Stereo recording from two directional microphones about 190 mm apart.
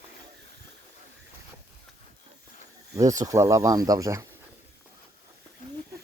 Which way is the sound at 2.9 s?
20° right (ahead or behind).